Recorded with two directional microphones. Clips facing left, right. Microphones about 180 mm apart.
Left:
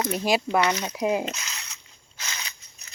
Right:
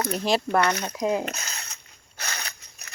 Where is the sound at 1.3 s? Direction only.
50° right (ahead or behind).